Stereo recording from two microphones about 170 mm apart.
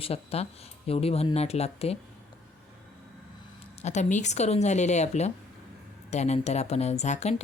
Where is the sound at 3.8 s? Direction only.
45° left (ahead or behind).